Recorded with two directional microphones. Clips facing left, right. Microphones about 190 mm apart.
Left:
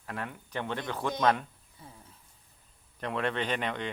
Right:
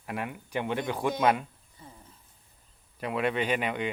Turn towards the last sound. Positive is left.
turn(degrees=-10)  # may be behind; listen again after turning